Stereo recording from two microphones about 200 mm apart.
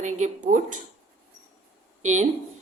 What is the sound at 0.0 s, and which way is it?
Speech, 40° right (ahead or behind).